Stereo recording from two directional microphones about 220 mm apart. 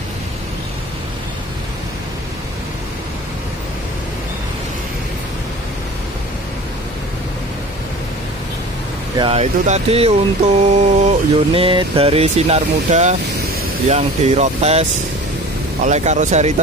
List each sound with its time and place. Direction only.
9.2 s speech: 30° right (ahead or behind)